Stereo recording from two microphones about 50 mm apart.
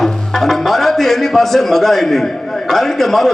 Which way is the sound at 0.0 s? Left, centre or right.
Centre.